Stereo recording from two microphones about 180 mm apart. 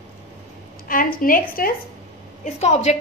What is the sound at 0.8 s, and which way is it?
Speech, 50° left (ahead or behind).